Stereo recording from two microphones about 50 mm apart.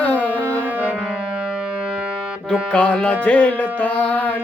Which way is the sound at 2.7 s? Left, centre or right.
Left.